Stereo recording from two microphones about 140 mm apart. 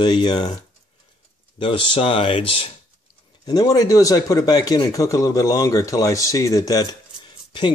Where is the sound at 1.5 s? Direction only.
35° left (ahead or behind).